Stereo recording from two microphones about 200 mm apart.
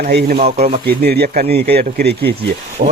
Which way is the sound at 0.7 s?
50° right (ahead or behind).